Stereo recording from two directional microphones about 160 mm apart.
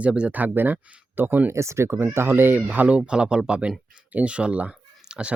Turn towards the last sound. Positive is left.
turn(degrees=-5)  # may be behind; listen again after turning